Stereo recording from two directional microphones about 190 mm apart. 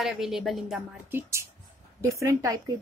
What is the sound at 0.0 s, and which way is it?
A woman's voice, centre (ahead or behind).